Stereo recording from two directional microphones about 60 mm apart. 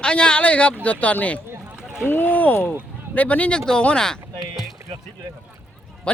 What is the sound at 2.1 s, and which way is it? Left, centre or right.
Speech, left.